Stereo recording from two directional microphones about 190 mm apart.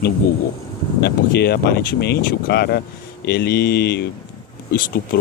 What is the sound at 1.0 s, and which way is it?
Speech, 60° left (ahead or behind).